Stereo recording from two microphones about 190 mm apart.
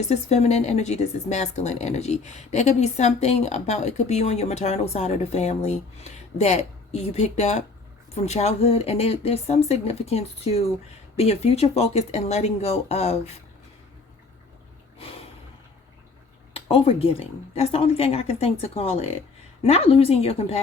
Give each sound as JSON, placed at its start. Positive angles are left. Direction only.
{"t": 0.0, "sound": "speech", "side_deg": 35}
{"t": 16.6, "sound": "speech", "side_deg": 30}